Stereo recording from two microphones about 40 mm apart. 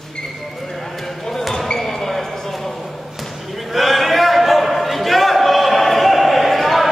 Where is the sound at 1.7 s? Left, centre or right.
Centre.